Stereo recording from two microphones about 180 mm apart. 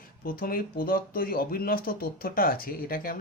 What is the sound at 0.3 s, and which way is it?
Speech, 55° left (ahead or behind).